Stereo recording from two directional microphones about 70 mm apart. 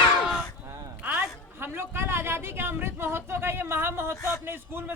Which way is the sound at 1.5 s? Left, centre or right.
Right.